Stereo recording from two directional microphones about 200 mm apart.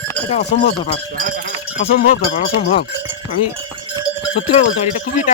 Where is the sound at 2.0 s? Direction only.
45° left (ahead or behind).